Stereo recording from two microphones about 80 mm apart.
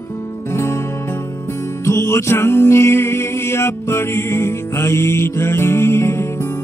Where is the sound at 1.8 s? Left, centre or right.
Left.